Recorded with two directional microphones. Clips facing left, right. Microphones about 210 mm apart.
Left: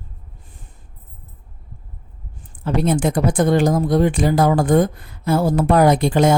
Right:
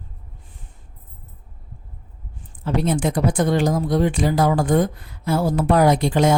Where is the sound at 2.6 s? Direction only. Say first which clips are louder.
Left 2 dB; 50° left (ahead or behind).